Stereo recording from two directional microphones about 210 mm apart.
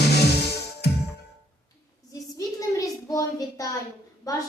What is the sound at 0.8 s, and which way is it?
Music, 50° left (ahead or behind).